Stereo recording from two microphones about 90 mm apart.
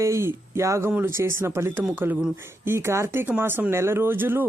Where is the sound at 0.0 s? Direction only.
35° right (ahead or behind).